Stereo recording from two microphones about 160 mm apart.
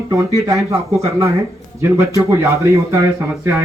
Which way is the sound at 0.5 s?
20° right (ahead or behind).